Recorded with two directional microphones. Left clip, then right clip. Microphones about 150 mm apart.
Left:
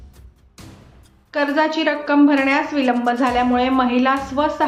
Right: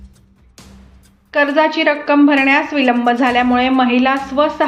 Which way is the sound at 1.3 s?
15° right (ahead or behind).